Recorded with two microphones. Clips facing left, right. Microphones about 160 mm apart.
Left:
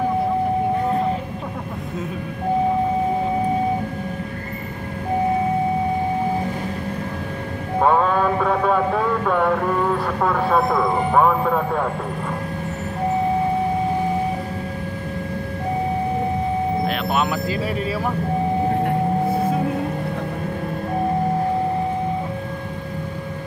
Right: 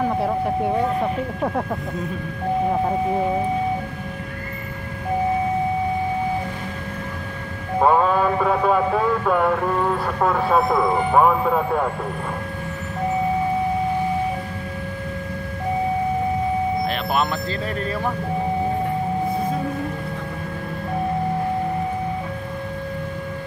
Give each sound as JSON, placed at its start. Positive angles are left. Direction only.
{"t": 7.8, "sound": "a sound", "side_deg": -5}
{"t": 10.2, "sound": "speech", "side_deg": -5}
{"t": 16.8, "sound": "speech", "side_deg": 0}